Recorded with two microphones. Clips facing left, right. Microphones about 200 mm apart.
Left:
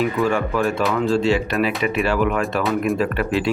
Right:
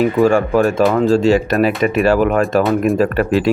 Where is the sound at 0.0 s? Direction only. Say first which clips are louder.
Right 7 dB; 45° right (ahead or behind).